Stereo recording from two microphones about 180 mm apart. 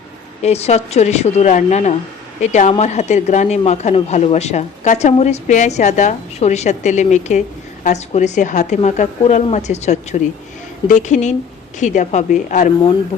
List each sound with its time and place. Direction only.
0.4 s a woman's voice: 35° left (ahead or behind)